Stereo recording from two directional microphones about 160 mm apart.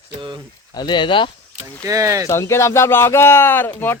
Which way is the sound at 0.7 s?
25° left (ahead or behind).